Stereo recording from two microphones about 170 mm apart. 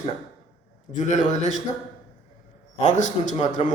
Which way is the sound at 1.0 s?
45° left (ahead or behind).